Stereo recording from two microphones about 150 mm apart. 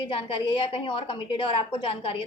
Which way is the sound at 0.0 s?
35° left (ahead or behind).